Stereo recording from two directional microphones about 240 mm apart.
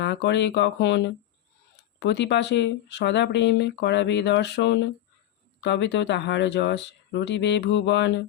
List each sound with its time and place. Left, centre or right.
0.0 s speech: left